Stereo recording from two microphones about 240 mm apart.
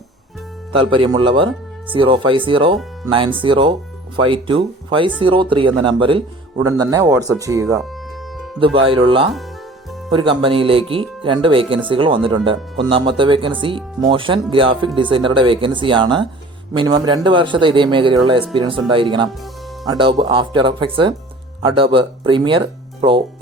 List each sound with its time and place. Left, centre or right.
0.7 s a man's voice: right